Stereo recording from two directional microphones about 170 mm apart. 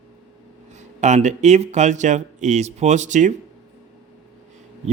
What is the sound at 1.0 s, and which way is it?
Speech, 45° right (ahead or behind).